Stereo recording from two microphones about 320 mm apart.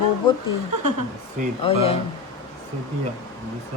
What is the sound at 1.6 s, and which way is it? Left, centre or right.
Speech, centre.